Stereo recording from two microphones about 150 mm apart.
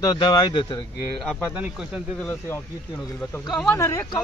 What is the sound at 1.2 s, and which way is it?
Speech, centre (ahead or behind).